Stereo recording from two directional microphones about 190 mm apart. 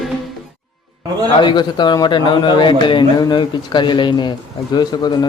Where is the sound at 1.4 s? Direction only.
25° left (ahead or behind).